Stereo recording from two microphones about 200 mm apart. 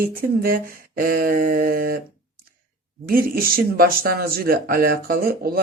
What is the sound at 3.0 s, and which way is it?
Speech, 45° right (ahead or behind).